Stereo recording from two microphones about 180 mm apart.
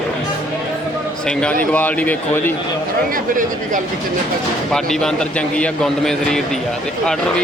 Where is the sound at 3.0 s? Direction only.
50° right (ahead or behind).